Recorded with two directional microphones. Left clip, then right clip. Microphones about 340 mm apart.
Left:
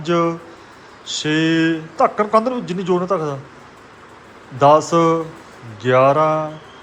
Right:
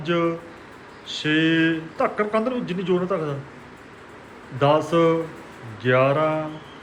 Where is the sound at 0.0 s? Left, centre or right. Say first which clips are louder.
Left 5 dB; centre.